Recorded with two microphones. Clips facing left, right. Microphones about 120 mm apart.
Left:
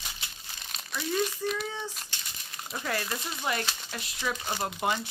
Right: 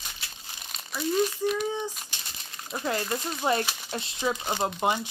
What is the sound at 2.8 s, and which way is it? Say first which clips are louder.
Speech: right 4 dB; 25° right (ahead or behind).